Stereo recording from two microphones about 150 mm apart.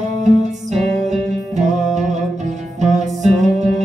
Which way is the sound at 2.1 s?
50° right (ahead or behind).